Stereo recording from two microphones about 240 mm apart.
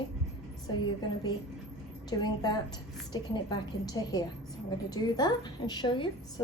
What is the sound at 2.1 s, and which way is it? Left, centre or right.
A woman's voice, centre.